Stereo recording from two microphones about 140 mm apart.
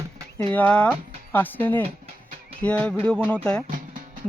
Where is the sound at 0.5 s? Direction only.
10° left (ahead or behind).